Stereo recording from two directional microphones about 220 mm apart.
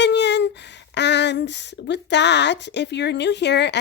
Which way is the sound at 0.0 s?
50° left (ahead or behind).